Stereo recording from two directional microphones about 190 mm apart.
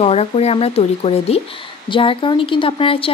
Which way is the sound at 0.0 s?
30° left (ahead or behind).